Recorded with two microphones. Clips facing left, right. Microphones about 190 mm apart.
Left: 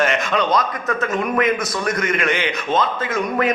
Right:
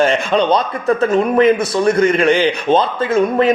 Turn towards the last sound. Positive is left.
turn(degrees=-30)  # may be behind; listen again after turning